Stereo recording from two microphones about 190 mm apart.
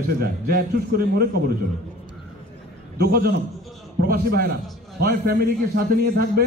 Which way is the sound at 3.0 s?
50° right (ahead or behind).